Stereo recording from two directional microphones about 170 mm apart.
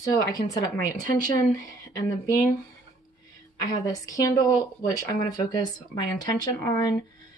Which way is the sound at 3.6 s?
20° left (ahead or behind).